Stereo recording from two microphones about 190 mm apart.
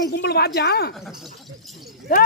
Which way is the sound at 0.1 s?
60° left (ahead or behind).